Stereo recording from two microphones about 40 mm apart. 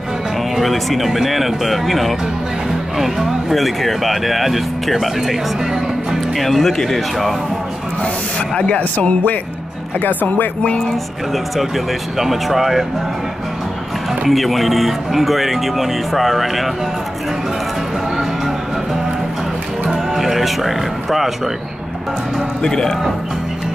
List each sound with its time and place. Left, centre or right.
0.6 s speech: centre
8.5 s speech: left
8.9 s speech: left
11.3 s speech: centre
14.2 s speech: centre
20.2 s speech: centre
22.6 s speech: centre